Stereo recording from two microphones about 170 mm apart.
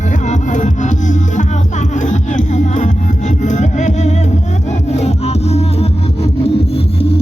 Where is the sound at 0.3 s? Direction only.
45° left (ahead or behind).